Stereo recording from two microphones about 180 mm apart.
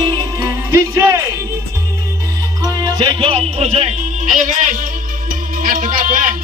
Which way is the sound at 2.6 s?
25° right (ahead or behind).